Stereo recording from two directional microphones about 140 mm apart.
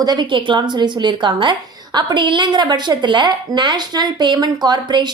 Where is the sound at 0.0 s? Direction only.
30° right (ahead or behind).